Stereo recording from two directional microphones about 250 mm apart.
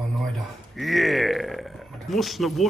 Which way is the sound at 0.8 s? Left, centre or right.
Centre.